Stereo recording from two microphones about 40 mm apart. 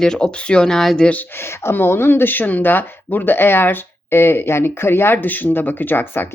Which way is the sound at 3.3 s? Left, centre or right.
Left.